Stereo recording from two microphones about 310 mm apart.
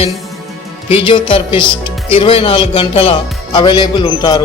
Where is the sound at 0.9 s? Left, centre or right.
Centre.